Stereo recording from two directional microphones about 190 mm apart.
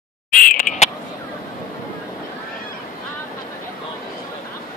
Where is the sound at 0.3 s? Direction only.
45° left (ahead or behind).